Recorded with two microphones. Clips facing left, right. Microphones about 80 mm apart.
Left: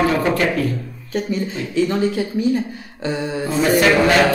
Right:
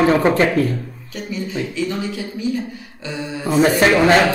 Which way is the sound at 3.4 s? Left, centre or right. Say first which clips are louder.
Right 4 dB; right.